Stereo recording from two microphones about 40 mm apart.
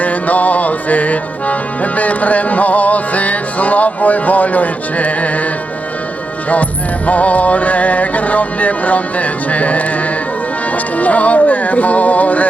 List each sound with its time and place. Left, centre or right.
0.0 s music: left
7.1 s music: left
10.9 s music: left